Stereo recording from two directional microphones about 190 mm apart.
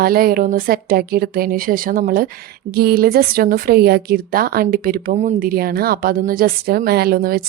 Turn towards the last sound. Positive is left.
turn(degrees=-55)  # may be behind; listen again after turning